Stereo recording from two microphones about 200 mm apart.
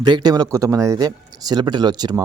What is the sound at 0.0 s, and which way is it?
Speech, 20° right (ahead or behind).